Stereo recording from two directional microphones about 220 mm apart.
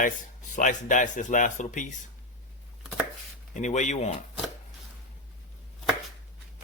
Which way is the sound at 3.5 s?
35° left (ahead or behind).